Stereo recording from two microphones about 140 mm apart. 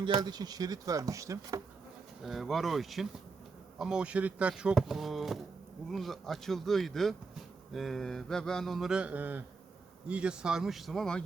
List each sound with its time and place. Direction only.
0.2 s speech: 30° right (ahead or behind)
2.2 s mantra: centre (ahead or behind)